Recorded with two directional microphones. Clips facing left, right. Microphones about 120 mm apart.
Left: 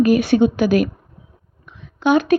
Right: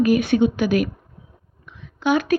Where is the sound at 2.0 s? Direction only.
25° left (ahead or behind).